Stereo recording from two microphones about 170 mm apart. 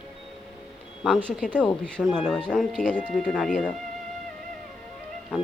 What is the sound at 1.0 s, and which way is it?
Speech, centre (ahead or behind).